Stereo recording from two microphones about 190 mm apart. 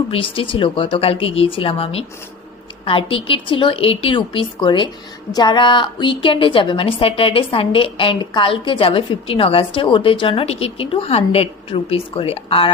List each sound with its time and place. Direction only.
0.1 s a woman's voice: 30° left (ahead or behind)